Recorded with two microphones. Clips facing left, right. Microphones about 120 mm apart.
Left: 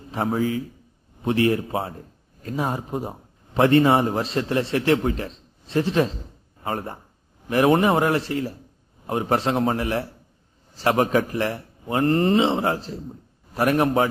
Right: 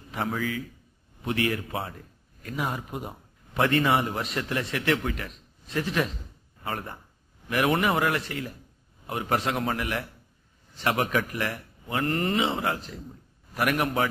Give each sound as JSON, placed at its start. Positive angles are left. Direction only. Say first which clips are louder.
{"t": 0.1, "sound": "a man's voice", "louder": "left 6 dB", "side_deg": 30}